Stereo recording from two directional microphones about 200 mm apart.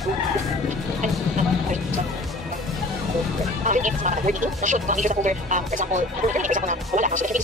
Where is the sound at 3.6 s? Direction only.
40° right (ahead or behind).